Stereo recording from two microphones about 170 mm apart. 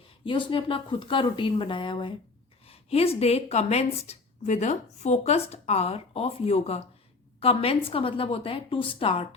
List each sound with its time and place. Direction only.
0.3 s speech: 30° left (ahead or behind)